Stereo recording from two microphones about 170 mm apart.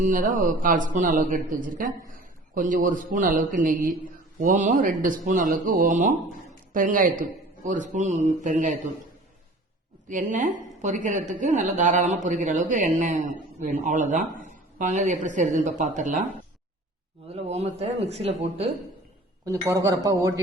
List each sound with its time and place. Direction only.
0.0 s speech: 50° right (ahead or behind)
10.1 s speech: 50° right (ahead or behind)
17.2 s a man's voice: 35° right (ahead or behind)
19.5 s speech: 15° right (ahead or behind)